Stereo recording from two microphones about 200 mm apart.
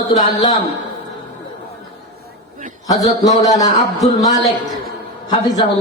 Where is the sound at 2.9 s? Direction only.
20° left (ahead or behind).